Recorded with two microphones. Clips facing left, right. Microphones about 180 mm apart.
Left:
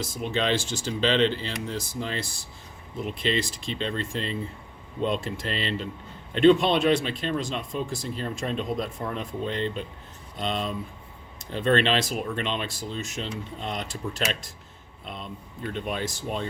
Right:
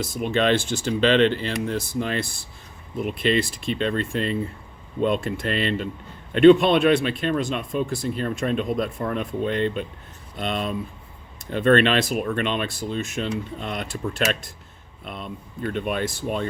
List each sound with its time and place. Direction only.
0.0 s speech: 60° right (ahead or behind)